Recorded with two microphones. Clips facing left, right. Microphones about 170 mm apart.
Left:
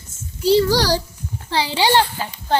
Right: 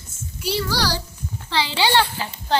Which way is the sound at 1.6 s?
15° left (ahead or behind).